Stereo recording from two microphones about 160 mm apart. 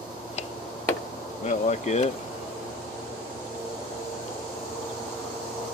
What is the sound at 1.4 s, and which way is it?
Bee, 45° left (ahead or behind).